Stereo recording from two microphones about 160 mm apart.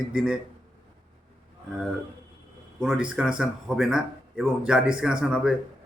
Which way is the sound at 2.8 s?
5° right (ahead or behind).